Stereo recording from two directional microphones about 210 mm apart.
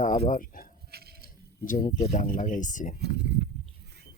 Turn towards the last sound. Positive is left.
turn(degrees=-50)  # may be behind; listen again after turning